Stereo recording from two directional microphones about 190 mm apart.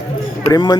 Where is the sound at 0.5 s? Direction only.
20° left (ahead or behind).